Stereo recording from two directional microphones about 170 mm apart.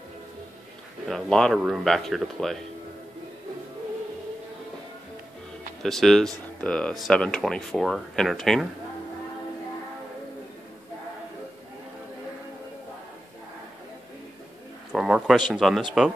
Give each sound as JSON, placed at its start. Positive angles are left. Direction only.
{"t": 1.0, "sound": "speech", "side_deg": 0}
{"t": 5.8, "sound": "speech", "side_deg": 0}
{"t": 14.9, "sound": "a sound", "side_deg": -5}
{"t": 15.5, "sound": "speech", "side_deg": 0}